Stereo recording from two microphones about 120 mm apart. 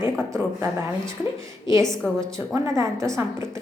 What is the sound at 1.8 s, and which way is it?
Speech, 5° left (ahead or behind).